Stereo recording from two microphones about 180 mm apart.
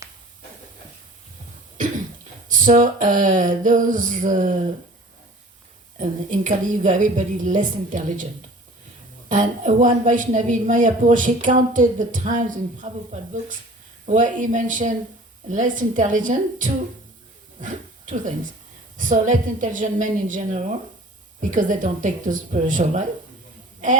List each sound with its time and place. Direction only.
2.5 s a woman's voice: 45° right (ahead or behind)
6.0 s a woman's voice: 45° right (ahead or behind)
9.3 s a woman's voice: 45° right (ahead or behind)
14.1 s a woman's voice: 45° right (ahead or behind)